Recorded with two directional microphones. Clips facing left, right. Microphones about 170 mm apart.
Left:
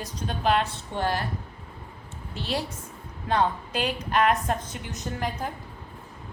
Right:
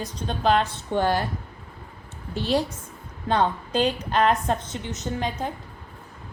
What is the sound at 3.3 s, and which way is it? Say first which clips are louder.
A woman's voice: right 2 dB; 30° right (ahead or behind).